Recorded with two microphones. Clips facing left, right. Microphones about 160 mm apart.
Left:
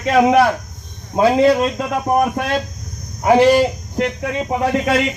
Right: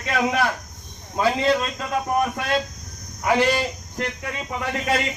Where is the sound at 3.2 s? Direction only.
35° left (ahead or behind).